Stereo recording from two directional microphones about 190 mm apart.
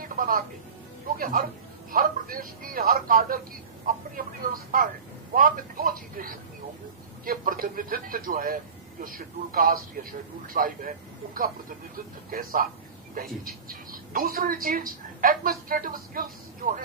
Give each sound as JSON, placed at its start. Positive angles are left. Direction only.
{"t": 0.0, "sound": "music", "side_deg": -45}
{"t": 1.1, "sound": "a woman's voice", "side_deg": -50}
{"t": 12.3, "sound": "a woman's voice", "side_deg": -50}